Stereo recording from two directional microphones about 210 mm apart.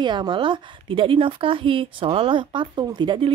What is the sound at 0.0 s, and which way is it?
A woman's voice, 20° right (ahead or behind).